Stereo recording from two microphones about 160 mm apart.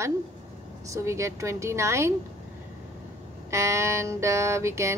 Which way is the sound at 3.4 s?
20° right (ahead or behind).